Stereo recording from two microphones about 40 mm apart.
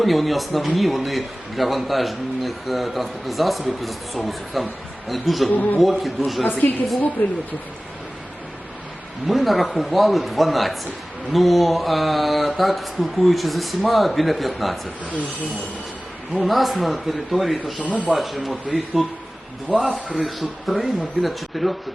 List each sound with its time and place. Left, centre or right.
0.0 s a man's voice: centre
6.4 s a woman's voice: left
7.2 s speech: left
9.2 s a man's voice: centre
16.3 s a man's voice: centre
19.7 s a man's voice: centre
20.1 s a man's voice: centre